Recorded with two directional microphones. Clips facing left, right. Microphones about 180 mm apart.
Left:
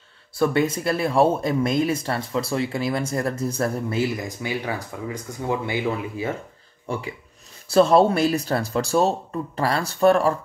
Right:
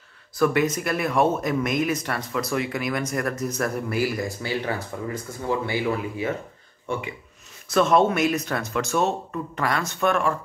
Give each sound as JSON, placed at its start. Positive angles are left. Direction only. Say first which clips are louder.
{"t": 0.4, "sound": "speech", "louder": "even", "side_deg": 30}
{"t": 6.9, "sound": "speech", "louder": "even", "side_deg": 35}